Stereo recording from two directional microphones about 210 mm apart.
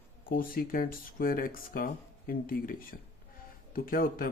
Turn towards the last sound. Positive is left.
turn(degrees=45)  # may be behind; listen again after turning